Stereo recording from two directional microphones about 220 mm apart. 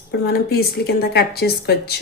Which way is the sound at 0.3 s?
45° left (ahead or behind).